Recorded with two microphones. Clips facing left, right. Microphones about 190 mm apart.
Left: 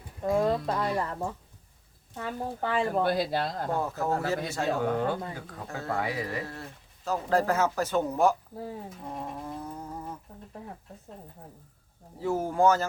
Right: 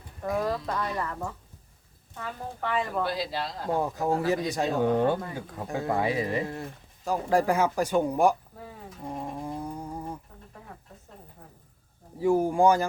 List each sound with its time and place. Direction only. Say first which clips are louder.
0.2 s speech: left 3 dB; 20° left (ahead or behind)
3.0 s speech: left 3 dB; 55° left (ahead or behind)
3.8 s speech: right 4 dB; 15° right (ahead or behind)
8.5 s speech: left 7 dB; 30° left (ahead or behind)
9.4 s a sound: right 3 dB; 15° right (ahead or behind)
12.2 s speech: right 3 dB; 15° right (ahead or behind)